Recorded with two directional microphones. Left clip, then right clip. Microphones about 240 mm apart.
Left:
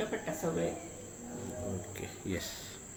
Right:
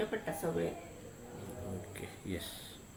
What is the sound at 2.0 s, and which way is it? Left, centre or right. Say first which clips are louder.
Cricket: left 5 dB; centre.